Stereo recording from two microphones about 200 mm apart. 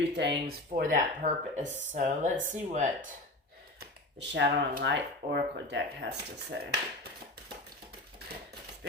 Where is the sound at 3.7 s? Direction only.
60° right (ahead or behind).